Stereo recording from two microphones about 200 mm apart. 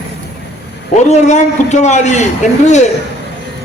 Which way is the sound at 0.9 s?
35° left (ahead or behind).